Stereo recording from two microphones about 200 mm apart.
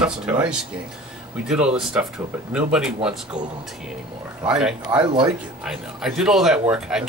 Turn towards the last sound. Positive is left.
turn(degrees=-5)  # may be behind; listen again after turning